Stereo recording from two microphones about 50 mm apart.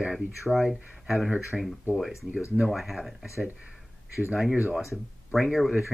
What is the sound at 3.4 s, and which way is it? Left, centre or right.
Speech, centre.